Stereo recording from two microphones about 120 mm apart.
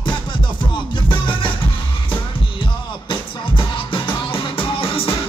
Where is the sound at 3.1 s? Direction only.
45° left (ahead or behind).